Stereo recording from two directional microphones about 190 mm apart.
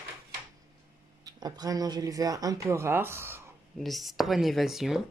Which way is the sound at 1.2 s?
20° right (ahead or behind).